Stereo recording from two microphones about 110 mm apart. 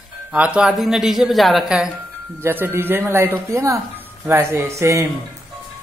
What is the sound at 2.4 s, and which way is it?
Speech, 20° right (ahead or behind).